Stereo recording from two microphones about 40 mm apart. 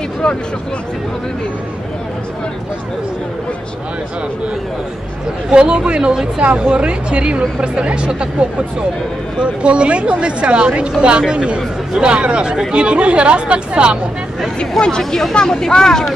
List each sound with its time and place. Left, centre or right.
5.5 s speech: right
14.8 s speech: centre